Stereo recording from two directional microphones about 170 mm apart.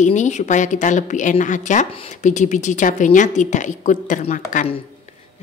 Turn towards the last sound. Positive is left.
turn(degrees=50)  # may be behind; listen again after turning